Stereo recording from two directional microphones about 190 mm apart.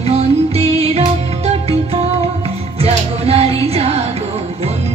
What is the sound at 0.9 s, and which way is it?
Music, 30° right (ahead or behind).